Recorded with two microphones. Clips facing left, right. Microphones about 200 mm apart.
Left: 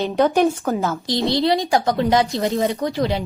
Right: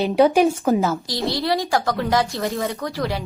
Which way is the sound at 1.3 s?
20° left (ahead or behind).